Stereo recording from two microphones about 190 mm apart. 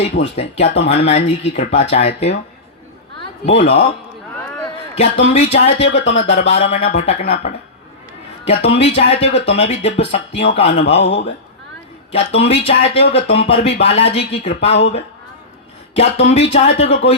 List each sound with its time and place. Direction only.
0.0 s speech: 30° left (ahead or behind)
3.4 s speech: 35° left (ahead or behind)
4.9 s speech: 35° left (ahead or behind)
8.4 s speech: 35° left (ahead or behind)
12.1 s speech: 30° left (ahead or behind)
14.7 s speech: 65° left (ahead or behind)
16.0 s speech: 35° left (ahead or behind)